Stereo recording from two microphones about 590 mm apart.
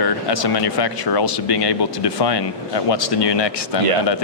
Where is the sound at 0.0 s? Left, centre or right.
Left.